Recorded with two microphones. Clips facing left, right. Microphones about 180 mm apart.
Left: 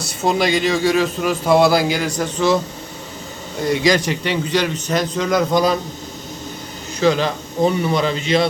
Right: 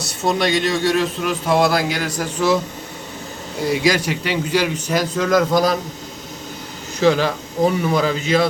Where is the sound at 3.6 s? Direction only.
5° right (ahead or behind).